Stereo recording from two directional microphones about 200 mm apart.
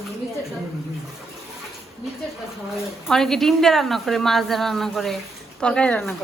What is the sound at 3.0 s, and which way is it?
Speech, centre (ahead or behind).